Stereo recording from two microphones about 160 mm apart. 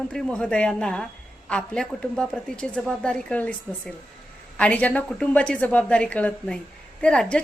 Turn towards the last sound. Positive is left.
turn(degrees=5)  # may be behind; listen again after turning